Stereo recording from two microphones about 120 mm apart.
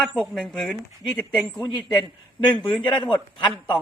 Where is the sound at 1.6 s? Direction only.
40° left (ahead or behind).